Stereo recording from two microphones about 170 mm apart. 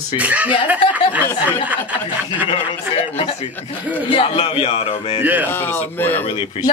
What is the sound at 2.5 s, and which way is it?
A woman's voice, 35° left (ahead or behind).